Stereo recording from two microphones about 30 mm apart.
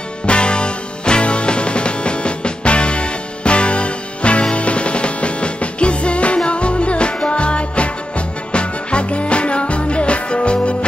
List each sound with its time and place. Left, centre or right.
0.3 s music: left